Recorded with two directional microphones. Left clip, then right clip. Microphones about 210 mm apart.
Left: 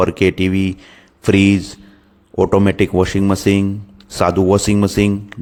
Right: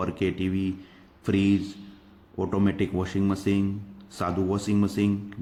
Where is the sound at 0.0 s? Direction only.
50° left (ahead or behind).